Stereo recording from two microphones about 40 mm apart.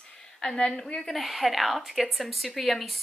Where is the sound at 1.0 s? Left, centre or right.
Centre.